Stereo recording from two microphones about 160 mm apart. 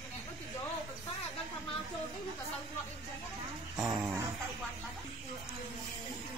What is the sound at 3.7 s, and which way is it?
Dog, 20° right (ahead or behind).